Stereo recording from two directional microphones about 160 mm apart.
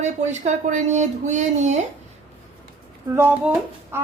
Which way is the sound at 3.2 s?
10° right (ahead or behind).